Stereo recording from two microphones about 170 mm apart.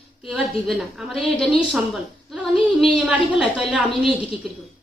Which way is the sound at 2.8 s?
5° right (ahead or behind).